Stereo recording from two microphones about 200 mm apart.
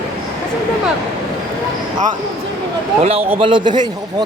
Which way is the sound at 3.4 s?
25° right (ahead or behind).